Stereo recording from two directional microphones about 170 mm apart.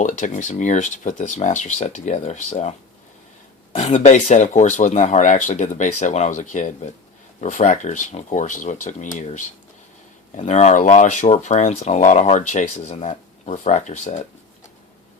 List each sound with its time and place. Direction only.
0.0 s speech: 45° left (ahead or behind)
3.8 s speech: 45° left (ahead or behind)